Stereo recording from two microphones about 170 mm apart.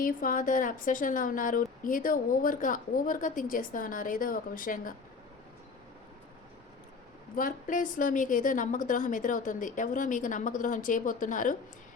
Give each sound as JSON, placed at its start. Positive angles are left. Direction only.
{"t": 0.0, "sound": "a woman's voice", "side_deg": 55}
{"t": 7.3, "sound": "a woman's voice", "side_deg": 50}